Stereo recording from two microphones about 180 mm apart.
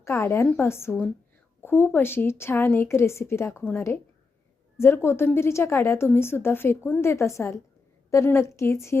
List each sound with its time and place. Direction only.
0.0 s a woman's voice: 15° left (ahead or behind)